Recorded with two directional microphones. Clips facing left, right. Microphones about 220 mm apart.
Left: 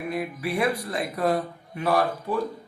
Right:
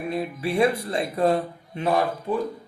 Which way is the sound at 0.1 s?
25° right (ahead or behind).